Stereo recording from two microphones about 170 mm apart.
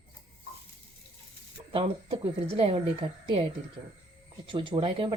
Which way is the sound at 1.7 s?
30° right (ahead or behind).